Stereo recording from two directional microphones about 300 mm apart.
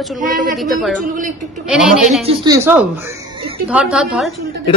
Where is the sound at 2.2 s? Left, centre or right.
Centre.